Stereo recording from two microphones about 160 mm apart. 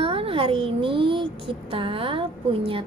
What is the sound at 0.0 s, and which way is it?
A woman's voice, 35° right (ahead or behind).